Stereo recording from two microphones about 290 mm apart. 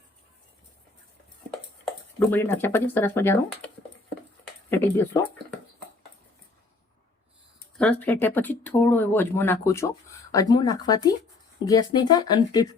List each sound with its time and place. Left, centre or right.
1.8 s speech: centre
4.7 s speech: centre
7.8 s speech: centre